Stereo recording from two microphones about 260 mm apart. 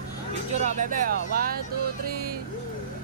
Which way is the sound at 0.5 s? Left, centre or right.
Right.